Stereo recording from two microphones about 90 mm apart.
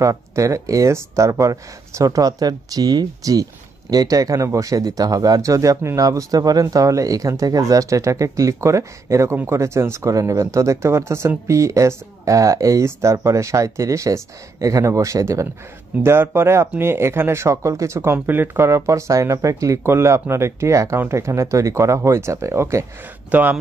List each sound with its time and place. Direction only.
0.0 s speech: 35° right (ahead or behind)
23.3 s speech: 15° right (ahead or behind)